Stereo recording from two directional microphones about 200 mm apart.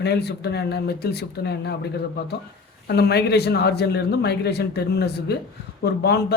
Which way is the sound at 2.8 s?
55° left (ahead or behind).